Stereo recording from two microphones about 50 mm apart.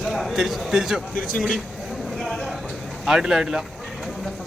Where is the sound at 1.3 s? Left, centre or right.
Centre.